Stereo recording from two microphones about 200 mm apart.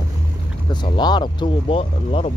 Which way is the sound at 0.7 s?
20° left (ahead or behind).